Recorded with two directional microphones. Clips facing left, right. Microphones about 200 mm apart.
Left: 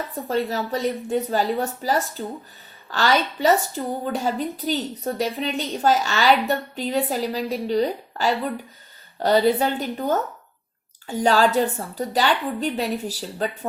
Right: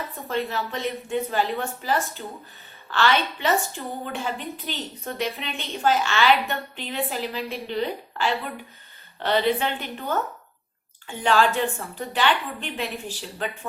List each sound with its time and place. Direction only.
0.3 s a woman's voice: 40° left (ahead or behind)